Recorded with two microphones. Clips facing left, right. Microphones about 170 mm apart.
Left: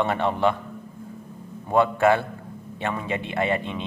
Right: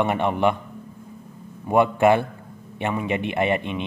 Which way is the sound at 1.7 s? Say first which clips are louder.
Right 2 dB; 15° right (ahead or behind).